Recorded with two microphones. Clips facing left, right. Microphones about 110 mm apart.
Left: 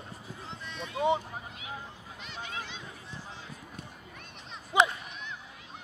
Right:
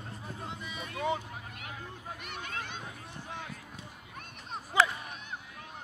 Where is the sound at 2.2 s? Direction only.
55° right (ahead or behind).